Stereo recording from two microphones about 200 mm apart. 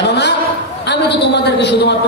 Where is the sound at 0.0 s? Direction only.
60° left (ahead or behind).